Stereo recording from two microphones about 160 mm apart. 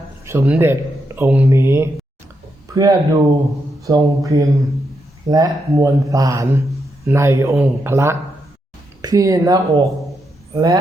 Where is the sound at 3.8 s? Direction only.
20° right (ahead or behind).